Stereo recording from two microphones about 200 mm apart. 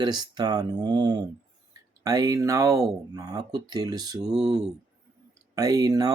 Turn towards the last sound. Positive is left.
turn(degrees=-15)  # may be behind; listen again after turning